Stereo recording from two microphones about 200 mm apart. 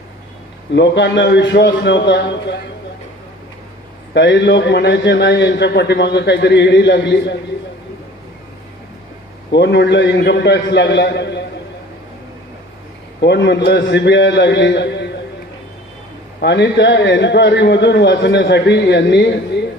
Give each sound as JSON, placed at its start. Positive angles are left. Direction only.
{"t": 0.7, "sound": "a man's voice", "side_deg": 60}
{"t": 4.1, "sound": "a man's voice", "side_deg": 60}
{"t": 9.5, "sound": "a man's voice", "side_deg": 60}
{"t": 13.2, "sound": "a man's voice", "side_deg": 60}
{"t": 16.4, "sound": "a man's voice", "side_deg": 60}